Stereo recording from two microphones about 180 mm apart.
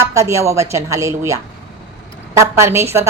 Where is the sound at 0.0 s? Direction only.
15° right (ahead or behind).